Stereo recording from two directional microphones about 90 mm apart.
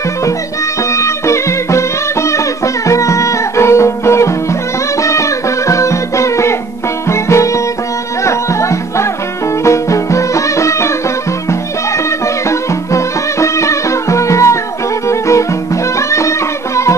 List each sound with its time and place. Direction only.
0.9 s music: 35° left (ahead or behind)
12.4 s music: 35° left (ahead or behind)